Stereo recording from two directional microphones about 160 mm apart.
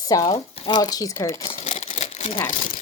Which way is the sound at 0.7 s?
25° left (ahead or behind).